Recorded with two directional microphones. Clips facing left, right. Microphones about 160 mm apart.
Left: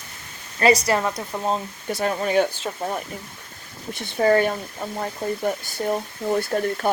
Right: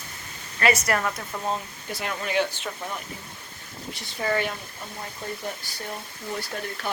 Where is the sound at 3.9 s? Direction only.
55° left (ahead or behind).